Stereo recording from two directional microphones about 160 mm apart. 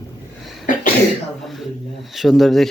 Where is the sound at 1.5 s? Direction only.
Centre (ahead or behind).